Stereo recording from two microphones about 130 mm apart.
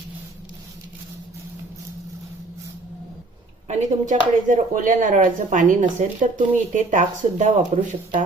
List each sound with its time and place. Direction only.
3.7 s speech: 65° right (ahead or behind)
4.4 s speech: 85° right; by 7.8 s 70° right (ahead or behind)